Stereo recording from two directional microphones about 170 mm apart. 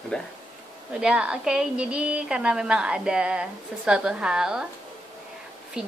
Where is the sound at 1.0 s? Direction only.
5° right (ahead or behind).